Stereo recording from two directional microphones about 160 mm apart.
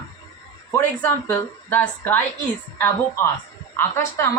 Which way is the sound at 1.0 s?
10° left (ahead or behind).